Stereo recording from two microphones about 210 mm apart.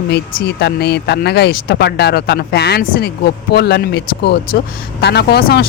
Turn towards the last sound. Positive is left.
turn(degrees=50)  # may be behind; listen again after turning